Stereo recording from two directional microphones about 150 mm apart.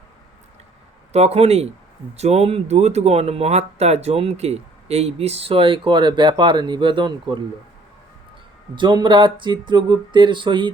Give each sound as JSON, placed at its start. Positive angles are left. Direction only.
{"t": 1.1, "sound": "speech", "side_deg": -45}
{"t": 8.7, "sound": "speech", "side_deg": -30}